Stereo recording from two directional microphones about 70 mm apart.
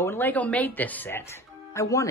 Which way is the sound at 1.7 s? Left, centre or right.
Left.